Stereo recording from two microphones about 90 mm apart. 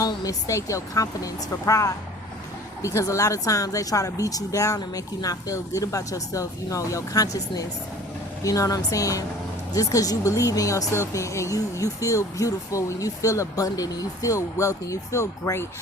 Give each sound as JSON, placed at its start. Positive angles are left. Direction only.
{"t": 0.0, "sound": "speech", "side_deg": 40}